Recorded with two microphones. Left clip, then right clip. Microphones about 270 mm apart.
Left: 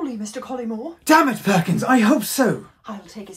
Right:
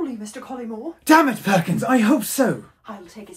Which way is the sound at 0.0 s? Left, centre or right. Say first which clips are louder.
Even; left.